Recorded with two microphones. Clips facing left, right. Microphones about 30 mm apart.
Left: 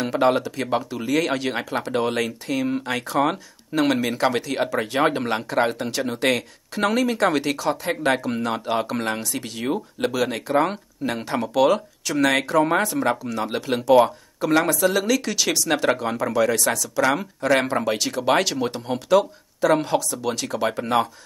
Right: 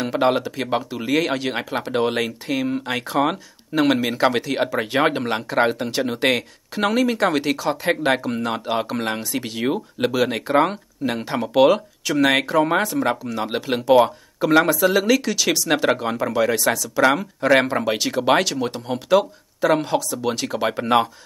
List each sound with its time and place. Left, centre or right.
0.0 s speech: centre
8.3 s speech: centre
10.7 s speech: centre
11.5 s speech: centre
15.2 s speech: centre
18.4 s speech: centre
19.0 s speech: centre
20.4 s speech: centre